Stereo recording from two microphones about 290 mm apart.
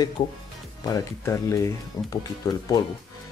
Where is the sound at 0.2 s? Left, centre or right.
Centre.